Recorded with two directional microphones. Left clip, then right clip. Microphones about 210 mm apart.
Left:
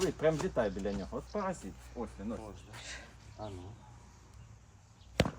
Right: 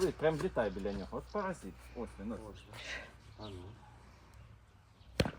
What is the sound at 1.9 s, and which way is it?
Speech, centre (ahead or behind).